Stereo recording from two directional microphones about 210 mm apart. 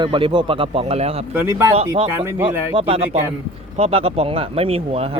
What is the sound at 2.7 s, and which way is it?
Speech, 25° right (ahead or behind).